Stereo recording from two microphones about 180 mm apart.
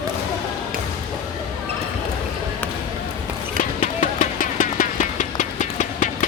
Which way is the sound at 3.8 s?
45° left (ahead or behind).